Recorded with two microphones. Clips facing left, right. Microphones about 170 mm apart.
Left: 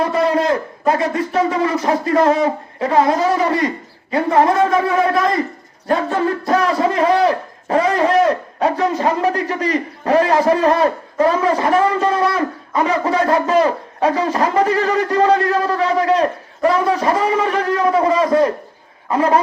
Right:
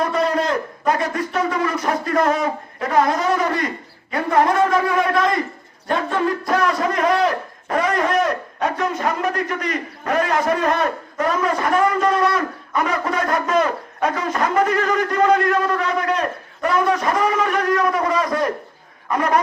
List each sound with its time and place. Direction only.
0.0 s a man's voice: 25° left (ahead or behind)